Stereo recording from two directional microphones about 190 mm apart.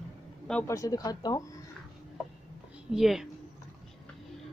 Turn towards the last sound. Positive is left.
turn(degrees=0)  # may be behind; listen again after turning